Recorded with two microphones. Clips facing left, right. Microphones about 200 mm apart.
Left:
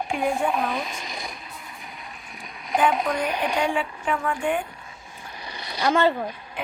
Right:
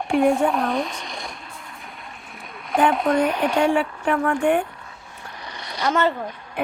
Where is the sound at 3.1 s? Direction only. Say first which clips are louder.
Right 6 dB; 65° right (ahead or behind).